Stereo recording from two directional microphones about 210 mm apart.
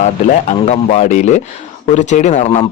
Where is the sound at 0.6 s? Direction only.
35° left (ahead or behind).